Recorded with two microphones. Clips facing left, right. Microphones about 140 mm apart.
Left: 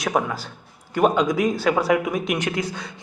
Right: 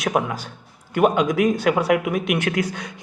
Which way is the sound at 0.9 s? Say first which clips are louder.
Right 1 dB; 10° right (ahead or behind).